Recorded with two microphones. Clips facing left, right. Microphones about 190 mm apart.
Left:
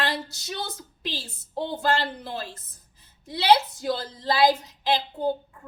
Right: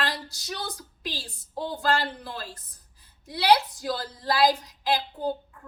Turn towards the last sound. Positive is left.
turn(degrees=25)  # may be behind; listen again after turning